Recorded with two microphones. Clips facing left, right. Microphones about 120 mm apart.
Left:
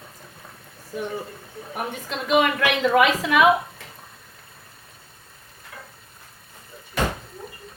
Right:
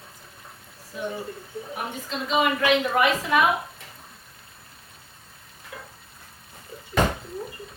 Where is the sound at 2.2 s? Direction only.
70° left (ahead or behind); by 3.4 s 90° left.